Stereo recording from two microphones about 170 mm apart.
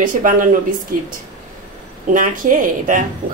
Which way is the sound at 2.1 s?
50° right (ahead or behind).